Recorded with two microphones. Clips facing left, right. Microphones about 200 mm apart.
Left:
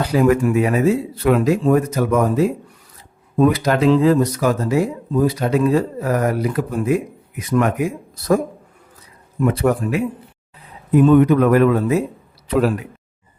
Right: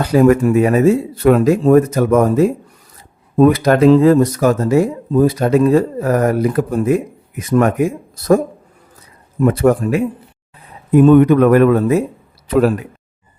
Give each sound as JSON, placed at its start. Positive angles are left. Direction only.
{"t": 0.1, "sound": "speech", "side_deg": -45}
{"t": 9.4, "sound": "speech", "side_deg": -45}